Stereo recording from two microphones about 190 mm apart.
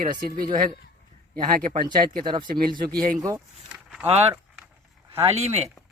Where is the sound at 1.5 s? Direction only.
45° right (ahead or behind).